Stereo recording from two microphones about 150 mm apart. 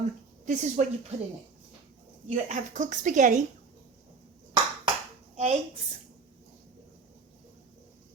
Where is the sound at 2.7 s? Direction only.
55° right (ahead or behind).